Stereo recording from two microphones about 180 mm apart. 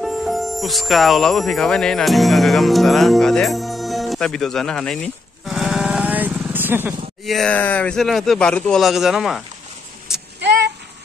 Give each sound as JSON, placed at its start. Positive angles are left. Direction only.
{"t": 0.0, "sound": "speech", "side_deg": 0}
{"t": 7.2, "sound": "a man's voice", "side_deg": 5}
{"t": 10.4, "sound": "vehicle", "side_deg": -75}